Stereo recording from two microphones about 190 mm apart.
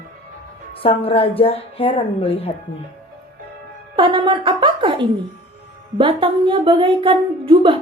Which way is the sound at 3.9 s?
25° right (ahead or behind).